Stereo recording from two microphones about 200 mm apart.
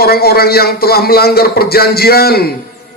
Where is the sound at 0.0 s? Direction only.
50° left (ahead or behind).